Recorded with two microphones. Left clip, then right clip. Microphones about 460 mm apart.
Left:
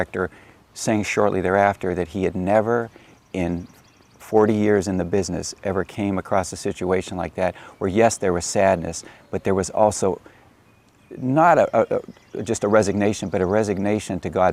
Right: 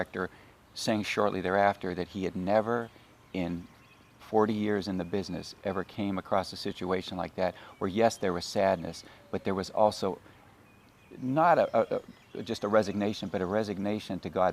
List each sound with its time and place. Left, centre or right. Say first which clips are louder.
0.0 s speech: left 9 dB; left
11.3 s speech: left 8 dB; left